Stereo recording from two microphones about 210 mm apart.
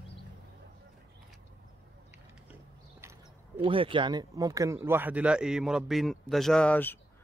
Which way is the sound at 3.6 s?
25° right (ahead or behind).